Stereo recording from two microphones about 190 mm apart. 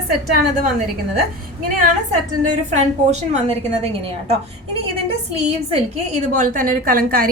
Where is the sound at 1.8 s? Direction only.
40° right (ahead or behind).